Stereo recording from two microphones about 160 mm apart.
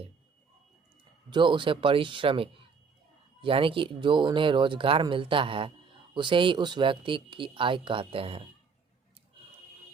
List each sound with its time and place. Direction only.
1.3 s speech: 30° right (ahead or behind)